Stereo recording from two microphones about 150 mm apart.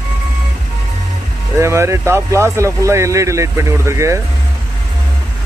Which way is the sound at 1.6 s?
20° right (ahead or behind).